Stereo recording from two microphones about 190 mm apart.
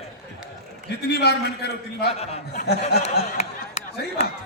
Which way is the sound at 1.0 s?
60° left (ahead or behind).